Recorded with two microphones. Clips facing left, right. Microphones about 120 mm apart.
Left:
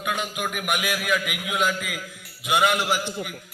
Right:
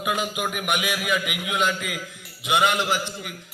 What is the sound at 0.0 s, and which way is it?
A man's voice, 5° right (ahead or behind).